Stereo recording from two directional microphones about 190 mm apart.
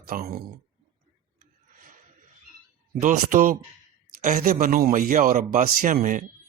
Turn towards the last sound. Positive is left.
turn(degrees=-45)  # may be behind; listen again after turning